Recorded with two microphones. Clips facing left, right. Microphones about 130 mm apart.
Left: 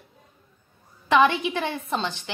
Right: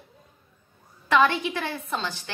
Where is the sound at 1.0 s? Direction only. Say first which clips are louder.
Left 2 dB; 20° left (ahead or behind).